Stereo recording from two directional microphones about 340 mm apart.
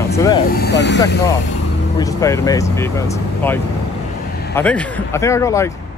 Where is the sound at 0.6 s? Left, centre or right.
Left.